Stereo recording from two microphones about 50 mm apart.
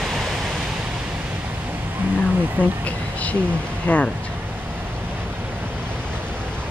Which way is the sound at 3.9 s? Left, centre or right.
Left.